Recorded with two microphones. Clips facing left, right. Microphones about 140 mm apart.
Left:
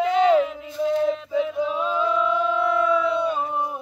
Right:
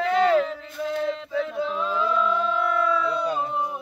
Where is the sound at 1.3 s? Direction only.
15° left (ahead or behind).